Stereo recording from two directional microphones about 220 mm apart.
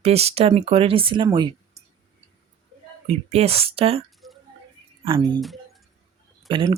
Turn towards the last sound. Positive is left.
turn(degrees=-20)  # may be behind; listen again after turning